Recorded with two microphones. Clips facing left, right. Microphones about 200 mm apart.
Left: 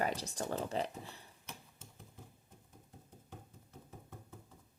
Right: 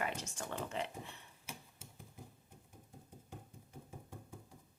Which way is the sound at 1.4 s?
10° right (ahead or behind).